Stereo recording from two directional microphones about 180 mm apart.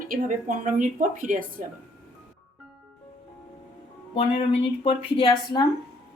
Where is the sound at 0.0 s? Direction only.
50° right (ahead or behind).